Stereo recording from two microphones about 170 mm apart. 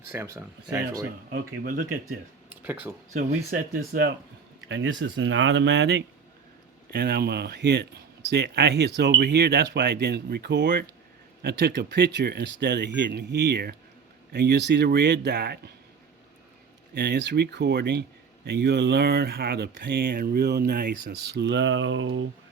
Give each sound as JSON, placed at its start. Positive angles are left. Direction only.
{"t": 0.1, "sound": "speech", "side_deg": -15}
{"t": 1.3, "sound": "speech", "side_deg": -55}
{"t": 2.0, "sound": "speech", "side_deg": -10}
{"t": 3.1, "sound": "speech", "side_deg": -55}
{"t": 4.7, "sound": "speech", "side_deg": -90}
{"t": 6.9, "sound": "speech", "side_deg": -70}
{"t": 14.3, "sound": "speech", "side_deg": -85}
{"t": 16.9, "sound": "speech", "side_deg": -75}